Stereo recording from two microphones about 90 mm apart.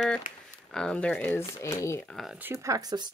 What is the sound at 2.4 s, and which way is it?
Speech, 25° right (ahead or behind).